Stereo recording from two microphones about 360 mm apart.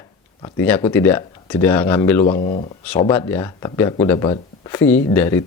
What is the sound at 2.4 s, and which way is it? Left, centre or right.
Speech, centre.